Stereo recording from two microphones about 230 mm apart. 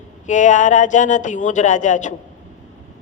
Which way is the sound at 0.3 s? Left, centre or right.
Left.